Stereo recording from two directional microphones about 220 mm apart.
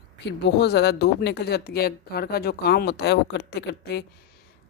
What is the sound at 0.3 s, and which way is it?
Speech, 50° left (ahead or behind).